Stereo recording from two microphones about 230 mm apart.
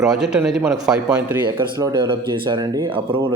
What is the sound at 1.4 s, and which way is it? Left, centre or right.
Speech, centre.